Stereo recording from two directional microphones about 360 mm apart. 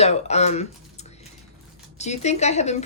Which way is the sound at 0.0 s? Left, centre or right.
Centre.